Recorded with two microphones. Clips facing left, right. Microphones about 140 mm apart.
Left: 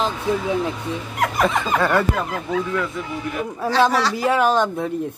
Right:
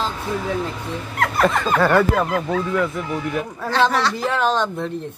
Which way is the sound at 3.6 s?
10° left (ahead or behind).